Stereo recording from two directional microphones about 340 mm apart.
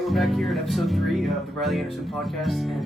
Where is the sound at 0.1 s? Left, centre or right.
Centre.